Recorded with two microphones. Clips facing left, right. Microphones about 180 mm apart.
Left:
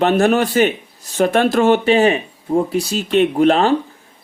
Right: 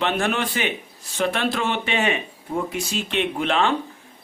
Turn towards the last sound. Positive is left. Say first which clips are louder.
# left 8 dB
turn(degrees=40)  # may be behind; listen again after turning